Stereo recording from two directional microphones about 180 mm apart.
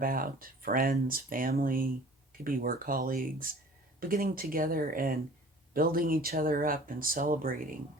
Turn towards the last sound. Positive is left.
turn(degrees=-50)  # may be behind; listen again after turning